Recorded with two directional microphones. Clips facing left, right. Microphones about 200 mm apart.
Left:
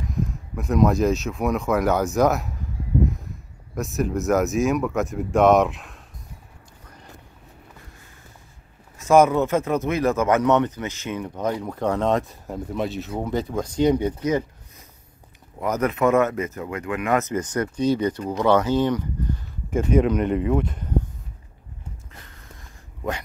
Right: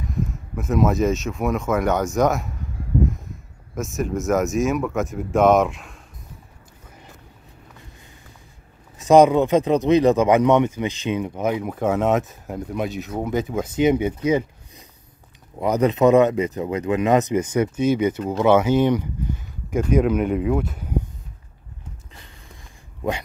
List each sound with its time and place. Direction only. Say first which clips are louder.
0.0 s speech: right 1 dB; centre (ahead or behind)
3.7 s speech: even; centre (ahead or behind)
8.9 s speech: right 3 dB; 20° right (ahead or behind); by 13.7 s 5° right (ahead or behind)
13.7 s speech: right 1 dB; 20° right (ahead or behind)
13.9 s speech: right 2 dB; 10° right (ahead or behind)
15.6 s speech: right 4 dB; 15° right (ahead or behind)
17.6 s speech: right 1 dB; 20° right (ahead or behind)
18.4 s speech: right 3 dB; 10° right (ahead or behind)